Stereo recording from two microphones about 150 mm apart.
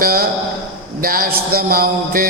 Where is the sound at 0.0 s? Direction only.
80° right.